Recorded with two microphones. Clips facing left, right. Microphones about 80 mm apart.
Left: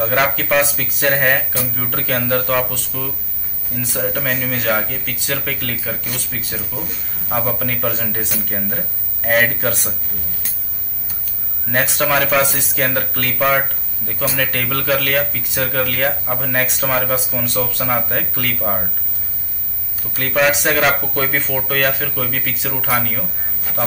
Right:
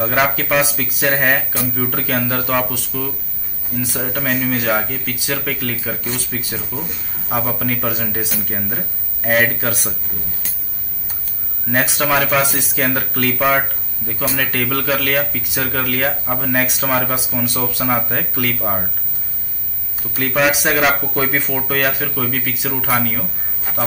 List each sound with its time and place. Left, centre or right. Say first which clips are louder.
0.0 s speech: even; centre
11.7 s speech: even; centre
20.2 s speech: even; centre
23.7 s speech: even; right